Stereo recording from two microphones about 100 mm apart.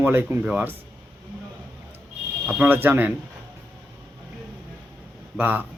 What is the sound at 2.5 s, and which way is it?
Speech, 20° right (ahead or behind).